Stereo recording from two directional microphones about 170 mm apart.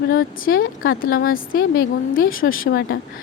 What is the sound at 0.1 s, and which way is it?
Speech, 60° left (ahead or behind).